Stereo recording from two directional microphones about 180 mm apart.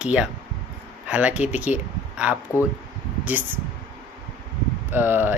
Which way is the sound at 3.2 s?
10° right (ahead or behind).